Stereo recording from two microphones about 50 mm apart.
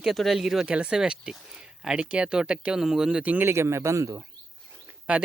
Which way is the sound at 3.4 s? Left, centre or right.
Right.